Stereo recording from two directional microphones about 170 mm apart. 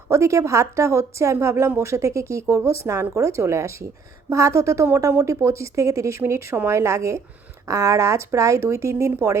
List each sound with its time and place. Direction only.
0.1 s a woman's voice: 15° right (ahead or behind)